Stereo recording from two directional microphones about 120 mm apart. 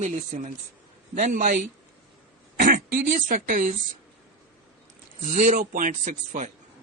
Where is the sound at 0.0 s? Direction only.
80° right.